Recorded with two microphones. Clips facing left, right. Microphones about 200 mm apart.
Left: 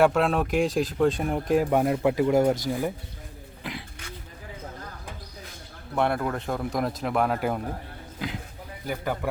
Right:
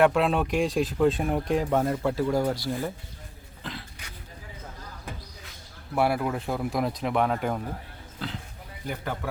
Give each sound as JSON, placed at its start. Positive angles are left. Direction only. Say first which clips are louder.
{"t": 0.0, "sound": "speech", "louder": "even", "side_deg": 0}
{"t": 1.7, "sound": "speech", "louder": "left 3 dB", "side_deg": 15}
{"t": 3.6, "sound": "throat clearing", "louder": "left 2 dB", "side_deg": 15}
{"t": 5.9, "sound": "speech", "louder": "even", "side_deg": -5}